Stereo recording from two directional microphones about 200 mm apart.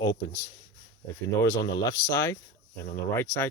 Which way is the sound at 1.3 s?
15° left (ahead or behind).